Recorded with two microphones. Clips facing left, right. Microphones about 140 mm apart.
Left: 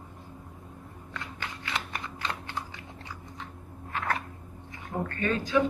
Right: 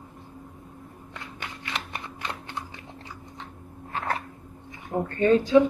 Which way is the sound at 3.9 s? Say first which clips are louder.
Right 2 dB; 35° right (ahead or behind).